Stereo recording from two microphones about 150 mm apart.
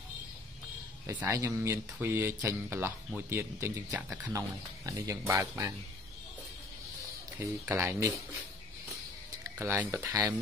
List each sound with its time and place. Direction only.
1.0 s speech: 20° right (ahead or behind)
7.3 s speech: 15° right (ahead or behind)
9.4 s speech: 15° right (ahead or behind)